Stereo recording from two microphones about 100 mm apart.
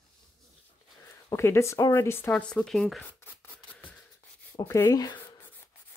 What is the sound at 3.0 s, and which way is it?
Scissors, 20° left (ahead or behind).